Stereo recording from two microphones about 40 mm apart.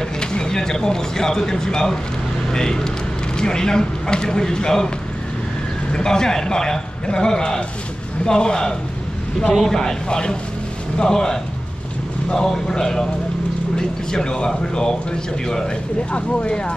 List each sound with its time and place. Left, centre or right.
0.2 s a man's voice: centre
5.9 s a man's voice: centre
16.1 s speech: left